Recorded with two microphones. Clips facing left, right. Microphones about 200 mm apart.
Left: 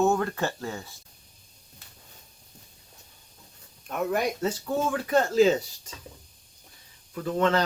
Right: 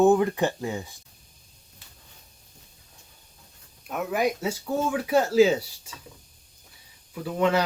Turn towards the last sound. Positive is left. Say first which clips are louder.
# right 1 dB
turn(degrees=-10)  # may be behind; listen again after turning